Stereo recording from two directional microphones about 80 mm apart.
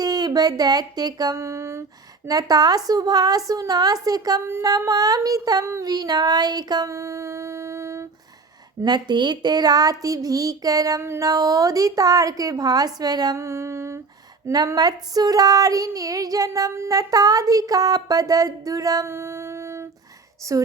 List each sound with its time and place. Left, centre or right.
0.0 s a sound: right
1.4 s a sound: right
2.2 s female singing: right
5.8 s child singing: right
6.8 s music: right
8.8 s female singing: right
13.3 s mantra: right
14.5 s speech: right
14.8 s female singing: right
19.0 s music: right
20.4 s female singing: right